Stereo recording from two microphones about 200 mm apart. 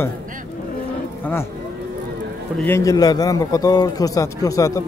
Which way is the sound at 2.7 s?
15° left (ahead or behind).